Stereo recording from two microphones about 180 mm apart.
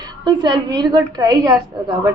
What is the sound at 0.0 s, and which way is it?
A woman's voice, 25° right (ahead or behind).